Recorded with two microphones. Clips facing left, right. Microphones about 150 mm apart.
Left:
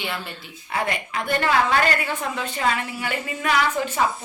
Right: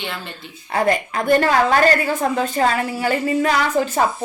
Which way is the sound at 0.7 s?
40° right (ahead or behind).